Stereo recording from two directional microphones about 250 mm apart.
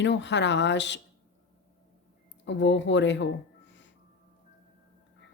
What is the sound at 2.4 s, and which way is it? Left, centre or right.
Speech, left.